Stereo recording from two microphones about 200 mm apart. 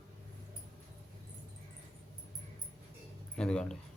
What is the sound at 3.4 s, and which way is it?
Speech, 5° left (ahead or behind).